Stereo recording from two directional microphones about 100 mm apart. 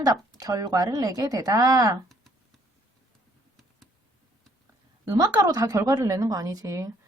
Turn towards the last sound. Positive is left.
turn(degrees=-35)  # may be behind; listen again after turning